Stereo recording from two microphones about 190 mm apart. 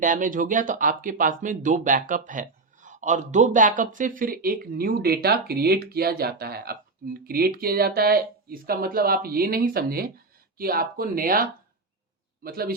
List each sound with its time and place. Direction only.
0.0 s speech: 45° right (ahead or behind)